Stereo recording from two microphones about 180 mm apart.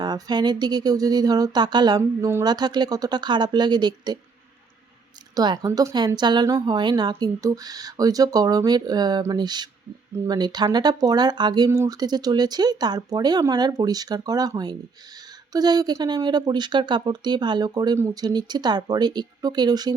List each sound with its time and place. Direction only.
0.0 s speech: 20° right (ahead or behind)
5.3 s speech: 20° right (ahead or behind)